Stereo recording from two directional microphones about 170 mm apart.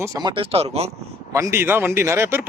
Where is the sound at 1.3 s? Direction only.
15° right (ahead or behind).